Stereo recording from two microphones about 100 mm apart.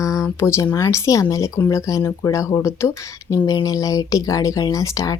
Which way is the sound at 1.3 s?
30° left (ahead or behind).